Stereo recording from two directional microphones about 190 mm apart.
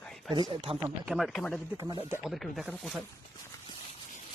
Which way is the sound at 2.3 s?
Centre (ahead or behind).